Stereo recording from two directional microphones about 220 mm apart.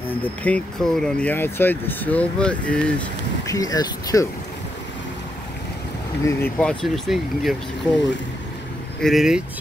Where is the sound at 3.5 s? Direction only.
15° left (ahead or behind).